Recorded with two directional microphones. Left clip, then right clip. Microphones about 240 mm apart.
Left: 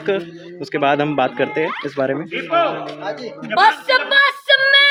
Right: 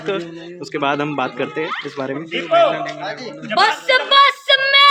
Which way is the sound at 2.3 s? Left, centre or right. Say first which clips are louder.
Right 7 dB; right.